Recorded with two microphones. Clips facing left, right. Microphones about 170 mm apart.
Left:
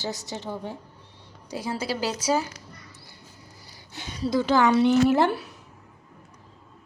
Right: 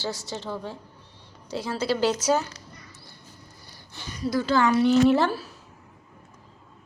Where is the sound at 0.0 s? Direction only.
20° left (ahead or behind).